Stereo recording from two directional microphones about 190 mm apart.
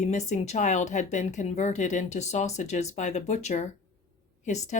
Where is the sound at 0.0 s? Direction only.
35° left (ahead or behind).